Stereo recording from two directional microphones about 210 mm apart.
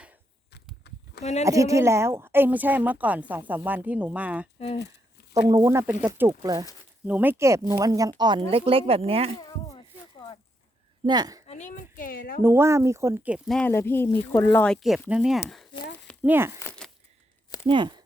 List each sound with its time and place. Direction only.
0.9 s a sound: 55° left (ahead or behind)
1.2 s speech: 30° left (ahead or behind)
1.5 s a woman's voice: 15° right (ahead or behind)
9.4 s a sound: 20° left (ahead or behind)
11.0 s a woman's voice: 20° right (ahead or behind)
11.4 s speech: 35° left (ahead or behind)
12.4 s a woman's voice: 10° right (ahead or behind)
13.6 s a woman's voice: 10° left (ahead or behind); by 16.6 s 10° right (ahead or behind)
16.6 s a sound: 10° left (ahead or behind)
17.7 s speech: 20° right (ahead or behind)